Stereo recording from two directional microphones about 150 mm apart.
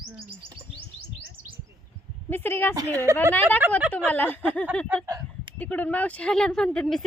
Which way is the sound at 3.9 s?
10° left (ahead or behind).